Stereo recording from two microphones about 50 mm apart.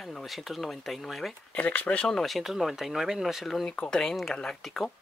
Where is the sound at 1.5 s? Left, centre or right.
Left.